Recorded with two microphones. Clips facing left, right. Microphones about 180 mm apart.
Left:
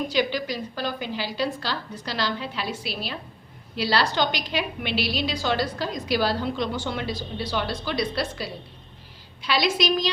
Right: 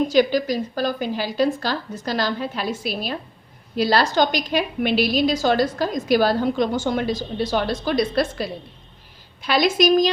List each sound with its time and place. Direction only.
0.1 s a woman's voice: 45° right (ahead or behind)